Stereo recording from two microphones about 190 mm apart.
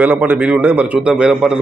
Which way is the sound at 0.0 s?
10° right (ahead or behind).